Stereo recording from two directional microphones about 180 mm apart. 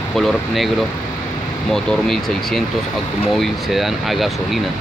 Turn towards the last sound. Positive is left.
turn(degrees=0)  # may be behind; listen again after turning